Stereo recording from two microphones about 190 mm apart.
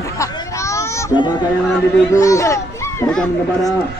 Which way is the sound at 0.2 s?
15° left (ahead or behind).